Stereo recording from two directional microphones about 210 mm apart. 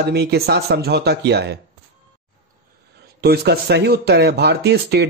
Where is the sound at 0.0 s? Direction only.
50° right (ahead or behind).